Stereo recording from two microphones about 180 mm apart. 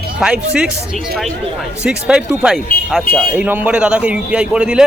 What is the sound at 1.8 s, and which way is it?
A man's voice, 5° right (ahead or behind).